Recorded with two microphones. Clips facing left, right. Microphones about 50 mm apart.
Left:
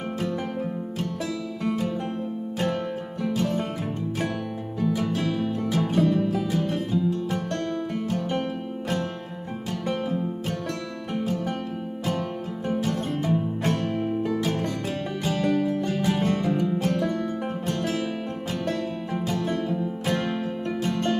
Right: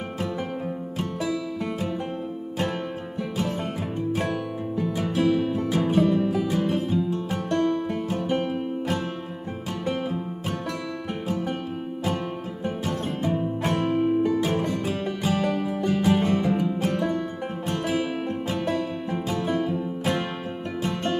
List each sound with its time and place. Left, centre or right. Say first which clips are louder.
3.3 s music: left 2 dB; centre
4.9 s music: right 3 dB; centre
6.9 s music: left 1 dB; right
7.5 s music: right 4 dB; centre
12.8 s music: left 1 dB; centre